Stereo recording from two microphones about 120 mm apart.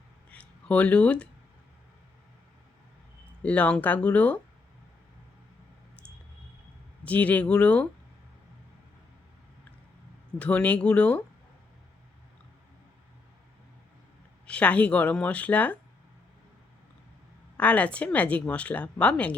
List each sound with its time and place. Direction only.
0.3 s a sound: 10° left (ahead or behind)
3.4 s speech: 10° left (ahead or behind)
7.0 s speech: 10° left (ahead or behind)
10.3 s speech: 10° left (ahead or behind)
14.4 s speech: 10° left (ahead or behind)
17.6 s speech: 10° left (ahead or behind)